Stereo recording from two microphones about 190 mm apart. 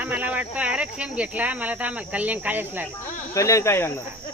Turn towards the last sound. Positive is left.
turn(degrees=15)  # may be behind; listen again after turning